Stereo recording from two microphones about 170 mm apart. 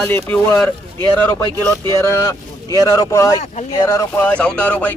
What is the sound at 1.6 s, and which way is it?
Speech, 15° left (ahead or behind).